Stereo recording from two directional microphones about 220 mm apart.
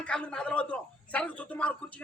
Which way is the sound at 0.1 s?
5° left (ahead or behind).